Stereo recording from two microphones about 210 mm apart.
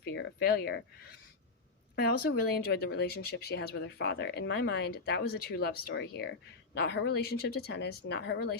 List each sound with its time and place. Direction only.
0.0 s speech: 50° left (ahead or behind)
2.0 s speech: 45° left (ahead or behind)